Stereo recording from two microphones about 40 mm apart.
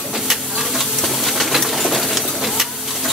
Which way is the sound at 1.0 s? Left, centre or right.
Centre.